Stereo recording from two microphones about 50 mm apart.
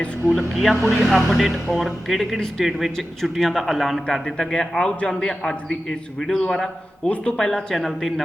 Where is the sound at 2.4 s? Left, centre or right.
Centre.